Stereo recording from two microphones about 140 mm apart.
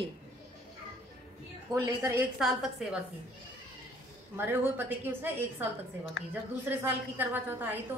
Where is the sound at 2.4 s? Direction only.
Centre (ahead or behind).